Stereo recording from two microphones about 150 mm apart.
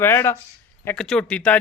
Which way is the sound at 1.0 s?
5° left (ahead or behind).